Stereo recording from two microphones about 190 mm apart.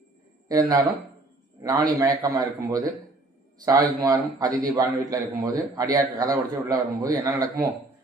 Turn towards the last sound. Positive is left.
turn(degrees=-20)  # may be behind; listen again after turning